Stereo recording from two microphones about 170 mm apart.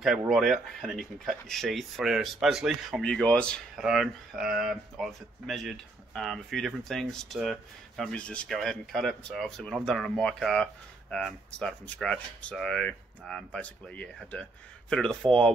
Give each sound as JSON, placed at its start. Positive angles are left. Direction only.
{"t": 0.3, "sound": "speech", "side_deg": 0}